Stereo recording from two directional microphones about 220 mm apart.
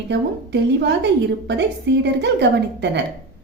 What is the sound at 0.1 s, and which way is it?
A woman's voice, 50° right (ahead or behind).